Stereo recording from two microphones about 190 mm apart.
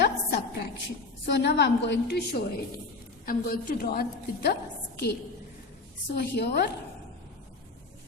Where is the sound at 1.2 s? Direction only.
65° left (ahead or behind).